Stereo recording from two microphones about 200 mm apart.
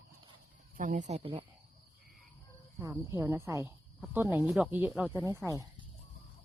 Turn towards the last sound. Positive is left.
turn(degrees=-15)  # may be behind; listen again after turning